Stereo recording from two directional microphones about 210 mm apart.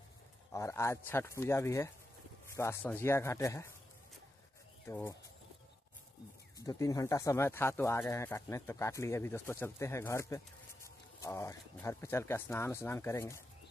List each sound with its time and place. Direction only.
0.5 s speech: 15° left (ahead or behind)
4.8 s speech: 10° left (ahead or behind)
6.6 s speech: 15° left (ahead or behind)